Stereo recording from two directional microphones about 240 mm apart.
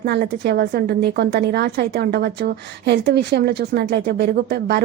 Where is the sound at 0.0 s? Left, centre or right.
Right.